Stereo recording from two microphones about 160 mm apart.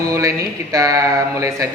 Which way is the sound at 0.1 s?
20° right (ahead or behind).